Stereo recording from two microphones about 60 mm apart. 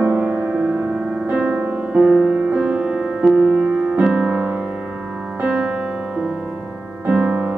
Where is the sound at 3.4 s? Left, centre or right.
Centre.